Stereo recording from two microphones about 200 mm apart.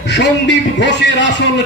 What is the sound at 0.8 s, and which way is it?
Speech, 60° left (ahead or behind).